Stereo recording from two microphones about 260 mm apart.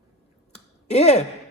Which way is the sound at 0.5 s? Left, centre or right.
Left.